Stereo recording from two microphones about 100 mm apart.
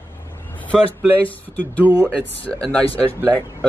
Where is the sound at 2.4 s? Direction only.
10° left (ahead or behind).